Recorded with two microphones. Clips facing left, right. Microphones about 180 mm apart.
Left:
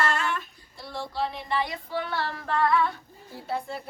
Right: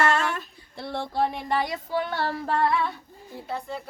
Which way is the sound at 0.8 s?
60° right (ahead or behind).